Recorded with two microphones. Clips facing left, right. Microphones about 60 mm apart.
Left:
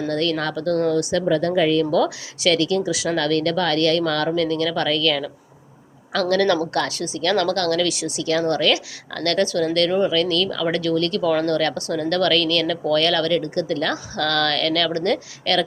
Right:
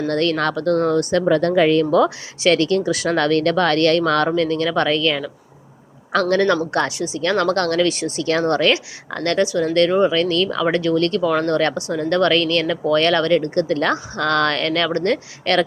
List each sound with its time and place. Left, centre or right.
0.1 s a woman's voice: right
1.9 s a woman's voice: right
6.7 s speech: right
11.2 s speech: centre
11.4 s speech: right